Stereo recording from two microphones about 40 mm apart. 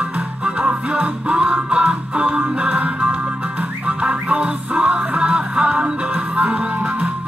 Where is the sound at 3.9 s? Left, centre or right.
Right.